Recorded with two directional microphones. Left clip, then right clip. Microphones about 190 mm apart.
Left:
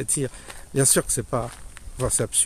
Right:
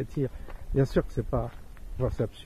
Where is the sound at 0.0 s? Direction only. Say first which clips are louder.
Left 4 dB; 20° left (ahead or behind).